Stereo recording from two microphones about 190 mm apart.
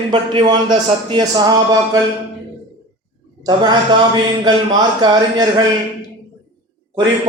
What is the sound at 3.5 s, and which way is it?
Speech, 20° right (ahead or behind).